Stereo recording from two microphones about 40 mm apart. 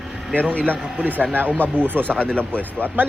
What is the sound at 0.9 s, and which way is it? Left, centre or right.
Speech, right.